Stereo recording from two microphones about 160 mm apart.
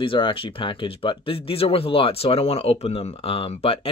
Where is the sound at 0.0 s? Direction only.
35° left (ahead or behind).